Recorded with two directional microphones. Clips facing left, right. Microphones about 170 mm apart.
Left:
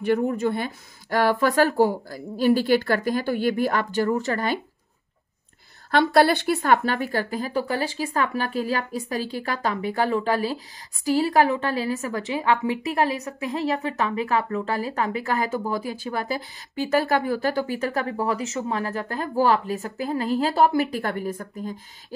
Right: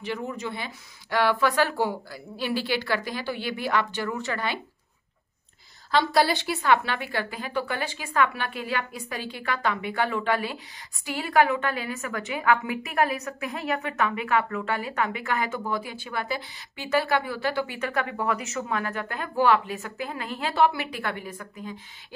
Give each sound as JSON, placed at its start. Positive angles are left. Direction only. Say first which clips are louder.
{"t": 0.0, "sound": "speech", "louder": "left 10 dB", "side_deg": 50}
{"t": 5.9, "sound": "a woman's voice", "louder": "left 4 dB", "side_deg": 55}